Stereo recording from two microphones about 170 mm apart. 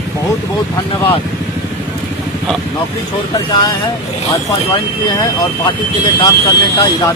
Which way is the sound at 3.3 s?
25° left (ahead or behind).